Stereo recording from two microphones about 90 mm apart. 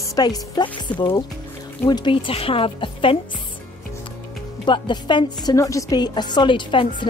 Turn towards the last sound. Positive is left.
turn(degrees=65)  # may be behind; listen again after turning